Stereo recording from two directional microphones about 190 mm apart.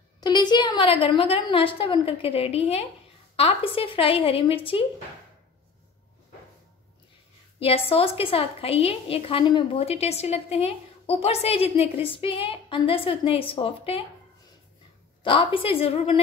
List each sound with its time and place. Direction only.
0.2 s a woman's voice: 20° left (ahead or behind)
7.5 s a woman's voice: 30° left (ahead or behind)
15.2 s a woman's voice: 30° left (ahead or behind)